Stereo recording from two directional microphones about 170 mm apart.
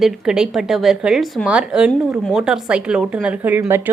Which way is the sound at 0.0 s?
Centre (ahead or behind).